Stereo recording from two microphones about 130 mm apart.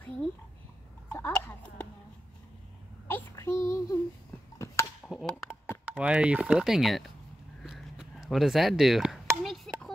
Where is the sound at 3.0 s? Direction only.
20° left (ahead or behind).